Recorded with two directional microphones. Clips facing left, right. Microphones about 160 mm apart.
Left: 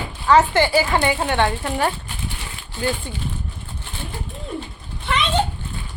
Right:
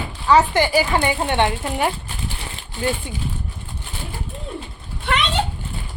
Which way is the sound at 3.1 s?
20° right (ahead or behind).